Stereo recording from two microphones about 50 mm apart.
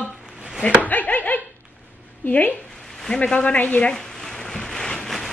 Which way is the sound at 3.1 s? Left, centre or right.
Left.